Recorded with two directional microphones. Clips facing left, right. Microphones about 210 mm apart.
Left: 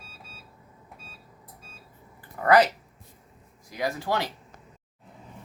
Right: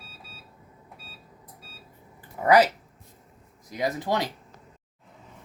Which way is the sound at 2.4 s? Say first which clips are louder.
Right 1 dB; 10° right (ahead or behind).